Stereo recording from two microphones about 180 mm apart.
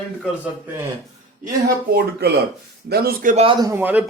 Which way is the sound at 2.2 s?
60° right (ahead or behind).